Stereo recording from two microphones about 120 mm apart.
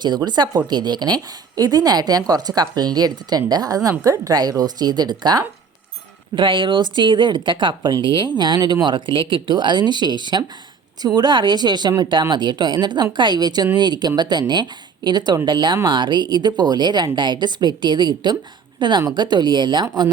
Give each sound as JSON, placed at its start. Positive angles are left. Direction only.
{"t": 0.0, "sound": "speech", "side_deg": -35}